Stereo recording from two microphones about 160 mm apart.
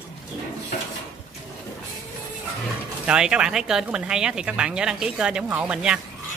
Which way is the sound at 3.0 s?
5° right (ahead or behind).